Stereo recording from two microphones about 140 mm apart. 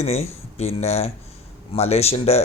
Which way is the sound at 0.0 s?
50° left (ahead or behind).